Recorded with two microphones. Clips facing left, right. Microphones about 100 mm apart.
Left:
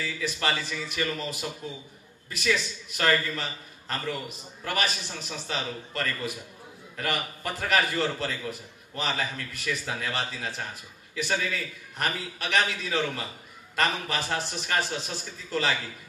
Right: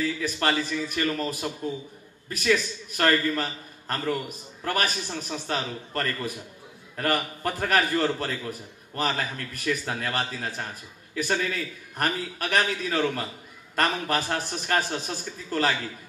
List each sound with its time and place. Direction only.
0.0 s a man's voice: 40° right (ahead or behind)